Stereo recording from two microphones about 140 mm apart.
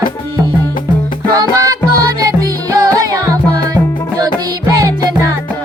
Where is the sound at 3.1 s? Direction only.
25° right (ahead or behind).